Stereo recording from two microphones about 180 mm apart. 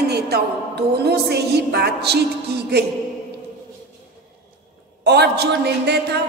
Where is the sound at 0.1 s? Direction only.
65° right (ahead or behind).